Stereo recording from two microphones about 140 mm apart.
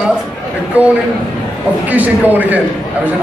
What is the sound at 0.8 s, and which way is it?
Speech, 10° right (ahead or behind).